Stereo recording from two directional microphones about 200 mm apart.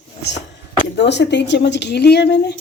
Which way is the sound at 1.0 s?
60° left (ahead or behind).